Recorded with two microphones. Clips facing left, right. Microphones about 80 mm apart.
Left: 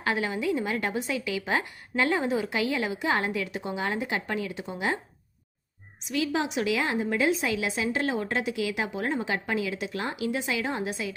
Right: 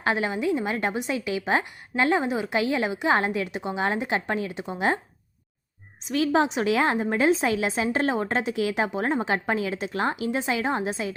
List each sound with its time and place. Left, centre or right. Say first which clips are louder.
0.0 s a woman's voice: right 3 dB; right
6.0 s a woman's voice: right 6 dB; right